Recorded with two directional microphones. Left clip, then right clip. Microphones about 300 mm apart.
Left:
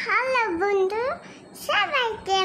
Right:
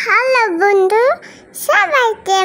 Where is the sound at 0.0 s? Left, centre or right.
Centre.